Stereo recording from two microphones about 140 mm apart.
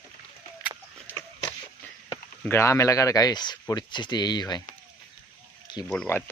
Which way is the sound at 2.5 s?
20° left (ahead or behind).